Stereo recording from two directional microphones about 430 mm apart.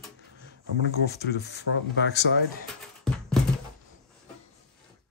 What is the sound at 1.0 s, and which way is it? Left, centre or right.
Speech, left.